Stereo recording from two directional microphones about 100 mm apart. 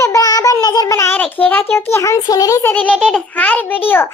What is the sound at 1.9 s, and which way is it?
Speech, 30° left (ahead or behind).